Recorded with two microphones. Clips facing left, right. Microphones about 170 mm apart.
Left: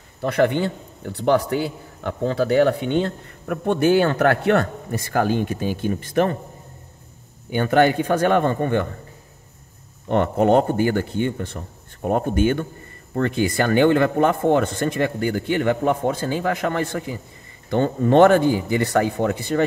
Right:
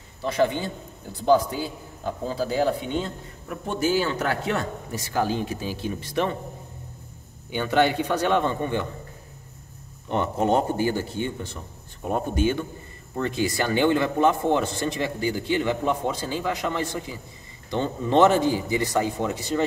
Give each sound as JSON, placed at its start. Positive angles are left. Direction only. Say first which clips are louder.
{"t": 0.2, "sound": "a man's voice", "louder": "left 4 dB", "side_deg": 60}
{"t": 7.5, "sound": "a man's voice", "louder": "left 4 dB", "side_deg": 50}
{"t": 10.0, "sound": "a man's voice", "louder": "left 6 dB", "side_deg": 60}